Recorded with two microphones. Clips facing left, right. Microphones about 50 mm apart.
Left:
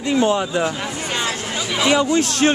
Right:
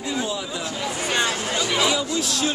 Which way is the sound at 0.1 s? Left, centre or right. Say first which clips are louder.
Left 10 dB; left.